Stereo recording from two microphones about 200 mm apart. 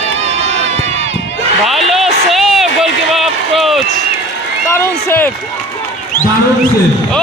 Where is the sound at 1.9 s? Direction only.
Centre (ahead or behind).